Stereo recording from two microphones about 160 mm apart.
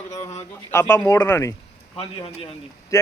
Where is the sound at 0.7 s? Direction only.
15° left (ahead or behind).